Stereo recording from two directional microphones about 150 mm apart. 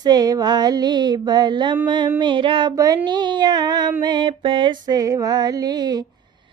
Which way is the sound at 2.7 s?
20° right (ahead or behind).